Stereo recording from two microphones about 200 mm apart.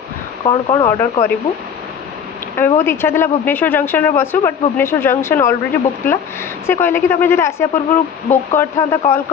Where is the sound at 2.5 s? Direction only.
10° left (ahead or behind).